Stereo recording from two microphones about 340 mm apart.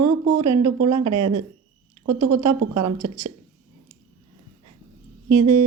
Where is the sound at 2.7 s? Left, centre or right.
Right.